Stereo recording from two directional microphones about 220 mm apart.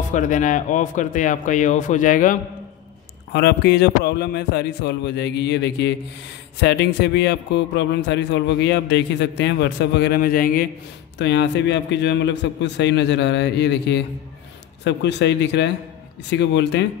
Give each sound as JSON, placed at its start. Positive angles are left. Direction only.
{"t": 0.1, "sound": "speech", "side_deg": 35}
{"t": 3.3, "sound": "a man's voice", "side_deg": 50}
{"t": 11.1, "sound": "a man's voice", "side_deg": 50}